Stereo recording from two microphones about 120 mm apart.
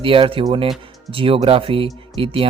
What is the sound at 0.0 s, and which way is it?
Speech, 45° right (ahead or behind).